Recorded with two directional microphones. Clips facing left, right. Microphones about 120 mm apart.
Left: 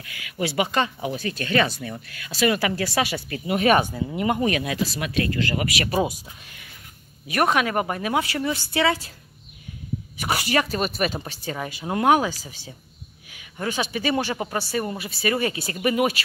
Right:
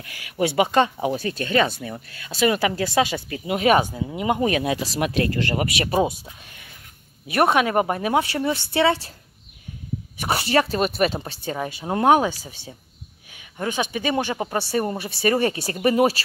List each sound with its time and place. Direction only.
0.4 s a woman's voice: 20° right (ahead or behind)
0.9 s a woman's voice: 30° right (ahead or behind); by 4.4 s 10° right (ahead or behind)
4.4 s a woman's voice: 25° right (ahead or behind)
7.2 s a woman's voice: 25° right (ahead or behind)
10.2 s a woman's voice: 30° right (ahead or behind)
14.8 s speech: 35° right (ahead or behind)